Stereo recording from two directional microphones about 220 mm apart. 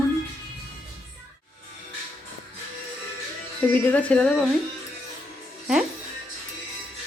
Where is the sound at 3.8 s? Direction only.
5° left (ahead or behind).